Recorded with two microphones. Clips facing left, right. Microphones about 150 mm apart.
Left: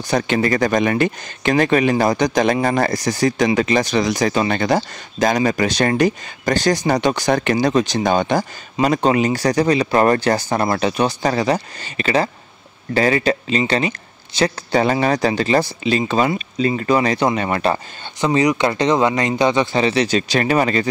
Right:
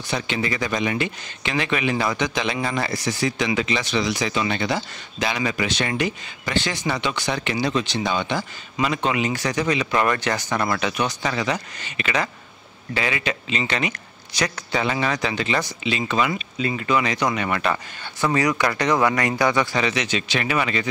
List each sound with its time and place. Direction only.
0.1 s a man's voice: 45° left (ahead or behind)
18.2 s speech: 20° left (ahead or behind); by 20.8 s 40° left (ahead or behind)